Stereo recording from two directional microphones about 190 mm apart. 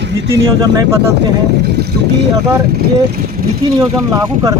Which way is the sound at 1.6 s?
60° right (ahead or behind).